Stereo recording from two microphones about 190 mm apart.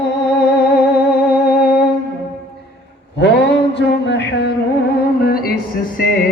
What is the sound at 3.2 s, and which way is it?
Mantra, 65° left (ahead or behind).